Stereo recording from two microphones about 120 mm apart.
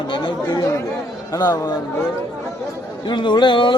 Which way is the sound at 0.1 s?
40° left (ahead or behind).